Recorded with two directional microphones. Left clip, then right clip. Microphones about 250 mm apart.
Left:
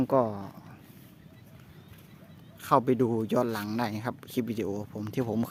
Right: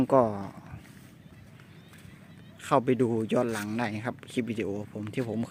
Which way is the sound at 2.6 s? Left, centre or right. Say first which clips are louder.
Left 1 dB; centre.